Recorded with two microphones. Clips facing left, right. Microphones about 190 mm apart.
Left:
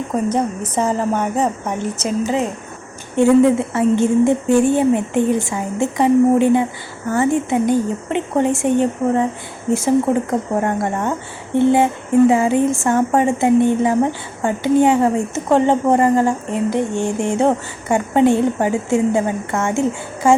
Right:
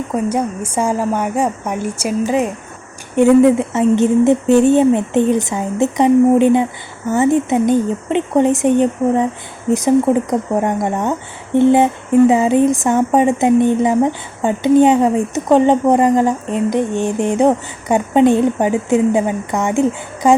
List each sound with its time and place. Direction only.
0.3 s a woman's voice: 10° right (ahead or behind)